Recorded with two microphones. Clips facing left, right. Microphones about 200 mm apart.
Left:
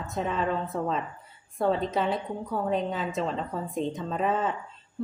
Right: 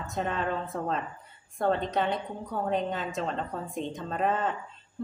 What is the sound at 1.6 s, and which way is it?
A woman's voice, centre (ahead or behind).